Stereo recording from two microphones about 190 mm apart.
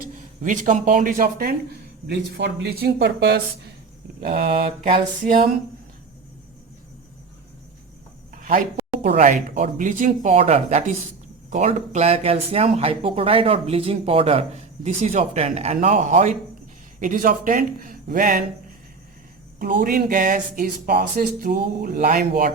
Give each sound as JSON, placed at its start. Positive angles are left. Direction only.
{"t": 0.0, "sound": "speech", "side_deg": -40}
{"t": 4.4, "sound": "speech", "side_deg": -35}
{"t": 8.3, "sound": "a sound", "side_deg": -45}
{"t": 9.1, "sound": "speech", "side_deg": -40}
{"t": 19.8, "sound": "speech", "side_deg": -45}